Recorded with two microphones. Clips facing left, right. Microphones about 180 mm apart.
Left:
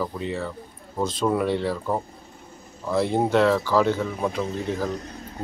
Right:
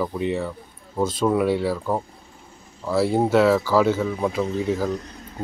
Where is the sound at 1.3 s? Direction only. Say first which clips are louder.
Right 2 dB; 5° right (ahead or behind).